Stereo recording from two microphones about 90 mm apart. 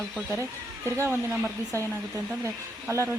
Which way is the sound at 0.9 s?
30° right (ahead or behind).